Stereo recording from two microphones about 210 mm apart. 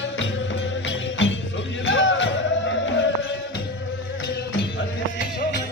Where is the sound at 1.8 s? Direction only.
60° left (ahead or behind).